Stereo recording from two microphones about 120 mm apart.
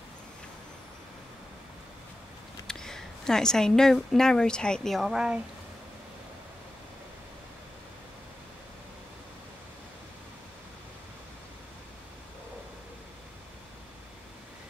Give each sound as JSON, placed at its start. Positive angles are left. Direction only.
{"t": 2.6, "sound": "speech", "side_deg": 5}